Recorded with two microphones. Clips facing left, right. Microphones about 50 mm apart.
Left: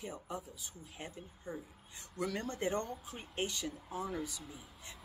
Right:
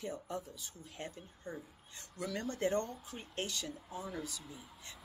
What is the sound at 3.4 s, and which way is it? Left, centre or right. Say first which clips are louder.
Speech: left 3 dB; left.